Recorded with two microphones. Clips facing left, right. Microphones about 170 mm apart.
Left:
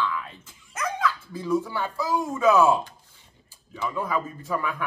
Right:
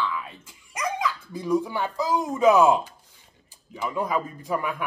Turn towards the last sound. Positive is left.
turn(degrees=-15)  # may be behind; listen again after turning